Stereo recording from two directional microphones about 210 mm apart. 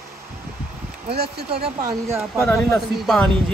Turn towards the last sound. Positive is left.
turn(degrees=0)  # may be behind; listen again after turning